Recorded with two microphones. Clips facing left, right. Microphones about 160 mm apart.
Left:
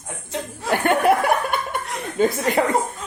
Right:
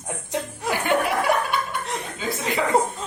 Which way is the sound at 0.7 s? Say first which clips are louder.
Left 5 dB; 55° left (ahead or behind).